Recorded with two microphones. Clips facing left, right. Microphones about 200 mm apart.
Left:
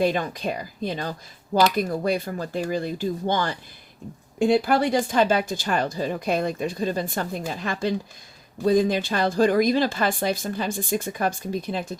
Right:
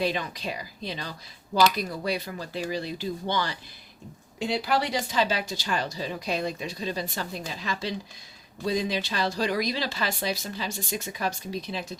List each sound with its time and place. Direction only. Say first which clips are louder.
0.0 s speech: left 6 dB; 50° left (ahead or behind)